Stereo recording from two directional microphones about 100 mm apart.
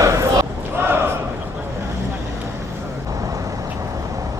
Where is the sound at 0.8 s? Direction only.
20° right (ahead or behind).